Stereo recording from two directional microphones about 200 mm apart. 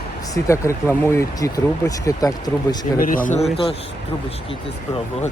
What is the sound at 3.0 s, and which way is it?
Speech, 45° left (ahead or behind).